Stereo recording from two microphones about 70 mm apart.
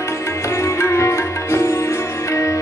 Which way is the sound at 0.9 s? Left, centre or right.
Left.